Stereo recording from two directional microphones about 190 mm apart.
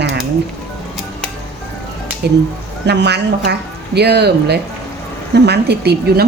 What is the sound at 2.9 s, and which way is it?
A woman's voice, 60° right (ahead or behind).